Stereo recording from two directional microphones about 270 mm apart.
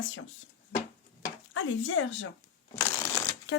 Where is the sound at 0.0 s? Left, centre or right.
Left.